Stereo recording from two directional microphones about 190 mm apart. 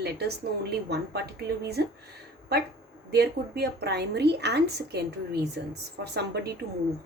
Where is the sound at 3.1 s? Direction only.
60° right (ahead or behind).